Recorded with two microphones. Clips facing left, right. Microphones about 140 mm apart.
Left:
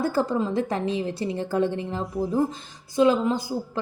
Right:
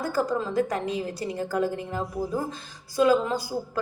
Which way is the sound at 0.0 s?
25° left (ahead or behind).